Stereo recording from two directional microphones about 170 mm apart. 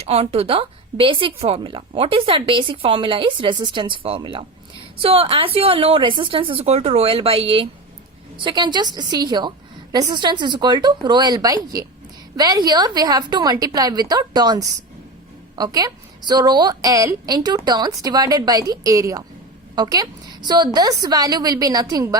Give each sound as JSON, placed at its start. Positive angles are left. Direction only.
{"t": 0.0, "sound": "a woman's voice", "side_deg": -35}